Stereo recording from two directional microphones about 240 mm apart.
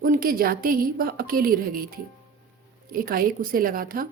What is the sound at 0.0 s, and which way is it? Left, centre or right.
A woman's voice, right.